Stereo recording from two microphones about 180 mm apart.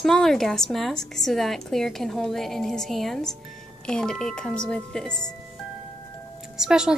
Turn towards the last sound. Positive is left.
turn(degrees=-5)  # may be behind; listen again after turning